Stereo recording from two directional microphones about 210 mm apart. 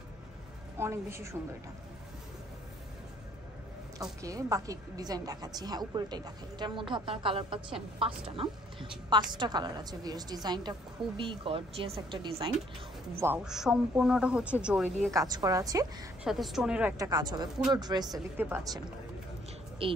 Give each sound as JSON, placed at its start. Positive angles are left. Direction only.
{"t": 0.7, "sound": "a woman's voice", "side_deg": -10}
{"t": 4.0, "sound": "a woman's voice", "side_deg": -15}
{"t": 13.1, "sound": "a man's voice", "side_deg": -10}
{"t": 15.0, "sound": "a woman's voice", "side_deg": -15}
{"t": 16.3, "sound": "a man's voice", "side_deg": 0}
{"t": 17.0, "sound": "a woman's voice", "side_deg": -20}
{"t": 19.8, "sound": "a woman's voice", "side_deg": -25}